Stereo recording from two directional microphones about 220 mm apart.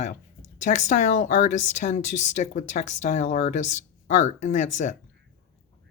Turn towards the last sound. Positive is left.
turn(degrees=35)  # may be behind; listen again after turning